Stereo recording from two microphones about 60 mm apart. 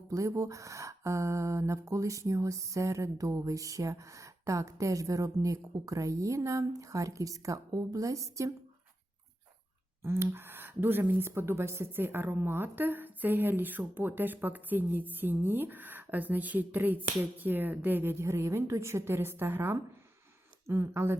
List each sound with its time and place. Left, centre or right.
0.1 s speech: right
10.0 s a woman's voice: right
11.9 s a woman's voice: right